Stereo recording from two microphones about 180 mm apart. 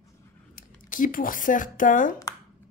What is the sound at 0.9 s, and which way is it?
Speech, 50° left (ahead or behind).